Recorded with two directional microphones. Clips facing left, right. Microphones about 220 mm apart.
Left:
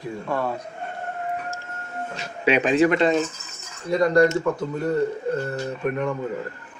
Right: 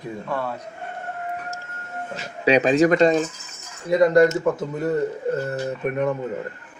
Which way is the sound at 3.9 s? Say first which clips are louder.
Right 3 dB; 20° right (ahead or behind).